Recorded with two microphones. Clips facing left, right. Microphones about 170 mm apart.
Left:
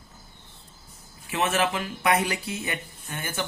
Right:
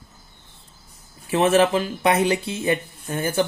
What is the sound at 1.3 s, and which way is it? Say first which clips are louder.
Speech: right 8 dB; 35° right (ahead or behind).